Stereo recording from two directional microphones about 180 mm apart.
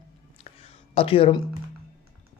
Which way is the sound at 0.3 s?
35° left (ahead or behind).